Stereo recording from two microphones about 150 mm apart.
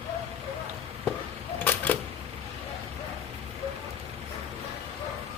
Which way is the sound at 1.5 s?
15° left (ahead or behind).